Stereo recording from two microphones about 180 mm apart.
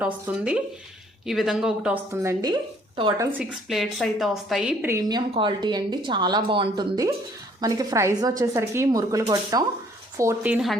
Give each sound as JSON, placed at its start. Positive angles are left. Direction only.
{"t": 0.0, "sound": "speech", "side_deg": -5}
{"t": 2.4, "sound": "speech", "side_deg": -25}
{"t": 3.7, "sound": "a woman's voice", "side_deg": 0}